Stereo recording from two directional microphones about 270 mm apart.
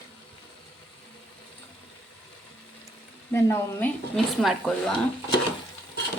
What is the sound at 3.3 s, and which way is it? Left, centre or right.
A woman's voice, centre.